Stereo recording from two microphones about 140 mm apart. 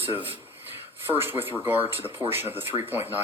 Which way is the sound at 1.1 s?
15° right (ahead or behind).